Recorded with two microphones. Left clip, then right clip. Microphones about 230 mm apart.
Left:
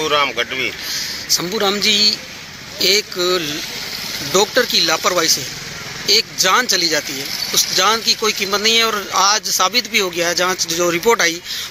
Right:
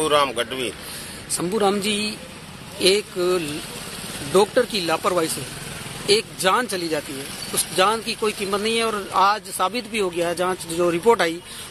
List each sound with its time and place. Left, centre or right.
0.1 s speech: centre
1.6 s speech: centre
6.4 s speech: centre